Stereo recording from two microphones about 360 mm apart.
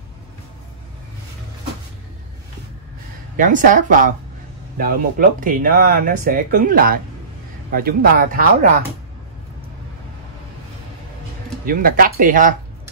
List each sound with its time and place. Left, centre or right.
3.3 s speech: right
11.6 s speech: right